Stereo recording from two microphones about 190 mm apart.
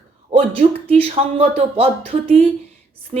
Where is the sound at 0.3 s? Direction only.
30° right (ahead or behind).